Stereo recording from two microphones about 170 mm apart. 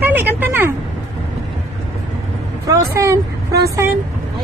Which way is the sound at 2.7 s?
20° right (ahead or behind).